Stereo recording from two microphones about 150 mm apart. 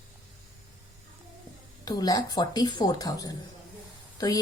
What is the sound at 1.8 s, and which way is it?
A woman's voice, 25° left (ahead or behind).